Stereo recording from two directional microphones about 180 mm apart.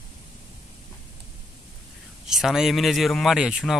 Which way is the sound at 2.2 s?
Centre (ahead or behind).